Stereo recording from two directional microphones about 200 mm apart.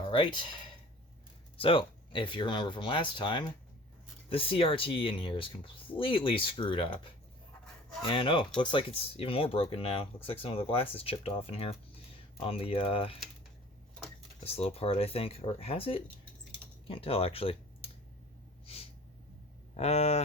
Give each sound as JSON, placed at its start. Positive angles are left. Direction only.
{"t": 0.1, "sound": "speech", "side_deg": 25}
{"t": 1.5, "sound": "speech", "side_deg": 25}
{"t": 14.4, "sound": "speech", "side_deg": 30}
{"t": 18.6, "sound": "snort", "side_deg": 30}
{"t": 19.7, "sound": "speech", "side_deg": 30}